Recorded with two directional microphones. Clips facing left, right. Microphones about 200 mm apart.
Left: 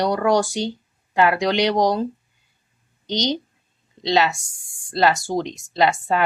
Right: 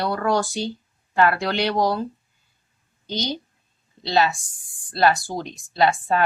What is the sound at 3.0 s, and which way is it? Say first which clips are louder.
A woman's voice: left 4 dB; 20° left (ahead or behind).